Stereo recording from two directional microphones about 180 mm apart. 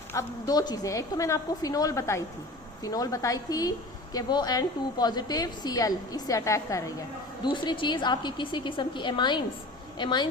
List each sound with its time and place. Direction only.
0.1 s a woman's voice: 20° left (ahead or behind)